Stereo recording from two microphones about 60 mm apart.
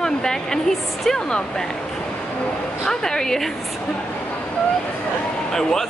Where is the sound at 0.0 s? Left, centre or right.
Centre.